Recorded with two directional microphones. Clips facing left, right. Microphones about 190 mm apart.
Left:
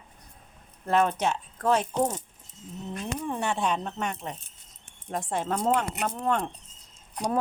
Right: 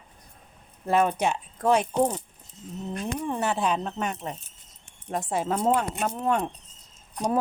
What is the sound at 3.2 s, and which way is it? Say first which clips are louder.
Speech: right 2 dB; 5° right (ahead or behind).